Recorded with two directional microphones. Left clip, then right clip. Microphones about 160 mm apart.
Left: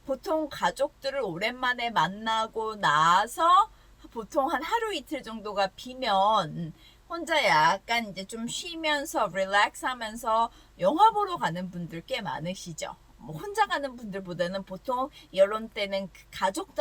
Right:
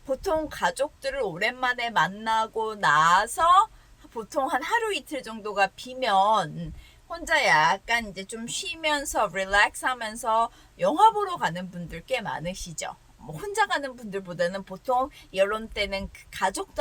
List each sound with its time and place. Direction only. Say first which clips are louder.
0.1 s a woman's voice: right 2 dB; 30° right (ahead or behind)